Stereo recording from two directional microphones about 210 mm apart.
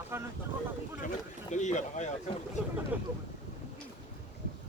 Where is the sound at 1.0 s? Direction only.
35° left (ahead or behind).